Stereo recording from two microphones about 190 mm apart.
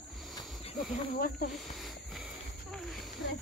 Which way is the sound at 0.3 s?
20° left (ahead or behind).